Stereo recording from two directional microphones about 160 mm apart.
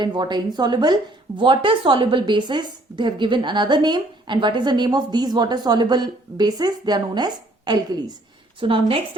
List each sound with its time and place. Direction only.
0.0 s a woman's voice: 30° right (ahead or behind)